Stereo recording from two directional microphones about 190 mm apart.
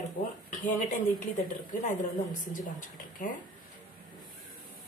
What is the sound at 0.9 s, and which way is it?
A woman's voice, 40° left (ahead or behind).